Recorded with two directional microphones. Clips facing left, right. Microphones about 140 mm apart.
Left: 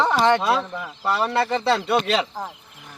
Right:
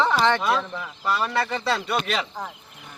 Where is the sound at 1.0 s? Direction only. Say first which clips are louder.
Left 3 dB; 30° left (ahead or behind).